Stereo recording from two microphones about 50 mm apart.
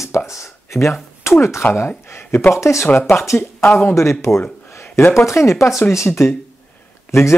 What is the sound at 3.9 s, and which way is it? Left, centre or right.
Speech, left.